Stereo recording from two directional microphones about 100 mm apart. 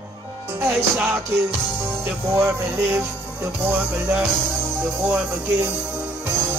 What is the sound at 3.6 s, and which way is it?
Speech, 15° right (ahead or behind).